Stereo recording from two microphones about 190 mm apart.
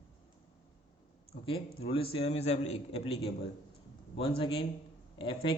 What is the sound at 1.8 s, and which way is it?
A man's voice, 30° left (ahead or behind).